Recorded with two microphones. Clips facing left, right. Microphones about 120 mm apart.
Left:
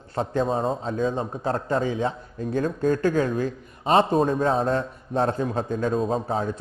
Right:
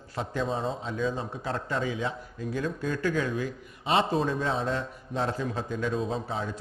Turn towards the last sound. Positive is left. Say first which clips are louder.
# left 7 dB
turn(degrees=45)  # may be behind; listen again after turning